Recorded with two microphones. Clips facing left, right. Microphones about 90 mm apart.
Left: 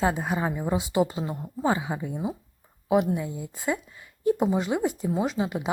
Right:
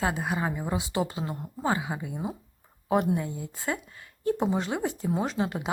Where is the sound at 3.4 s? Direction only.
15° left (ahead or behind).